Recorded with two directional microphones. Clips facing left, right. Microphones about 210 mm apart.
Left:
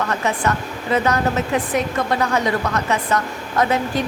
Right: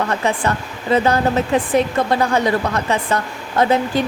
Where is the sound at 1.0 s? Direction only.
30° right (ahead or behind).